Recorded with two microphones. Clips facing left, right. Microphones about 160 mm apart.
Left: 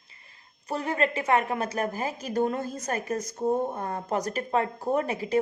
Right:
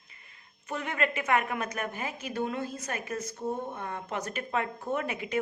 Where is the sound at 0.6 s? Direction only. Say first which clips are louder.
Left 4 dB; 35° left (ahead or behind).